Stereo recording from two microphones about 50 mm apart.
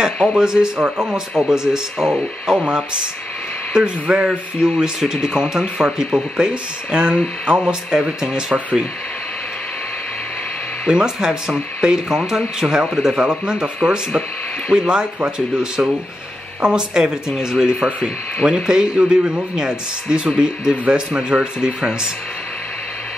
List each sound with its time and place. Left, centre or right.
0.2 s speech: centre
10.9 s speech: centre
14.7 s speech: centre